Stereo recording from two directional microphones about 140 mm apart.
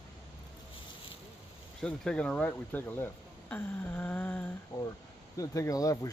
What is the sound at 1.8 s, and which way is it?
Speech, 5° left (ahead or behind).